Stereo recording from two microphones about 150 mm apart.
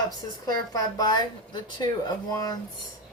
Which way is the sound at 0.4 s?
25° left (ahead or behind).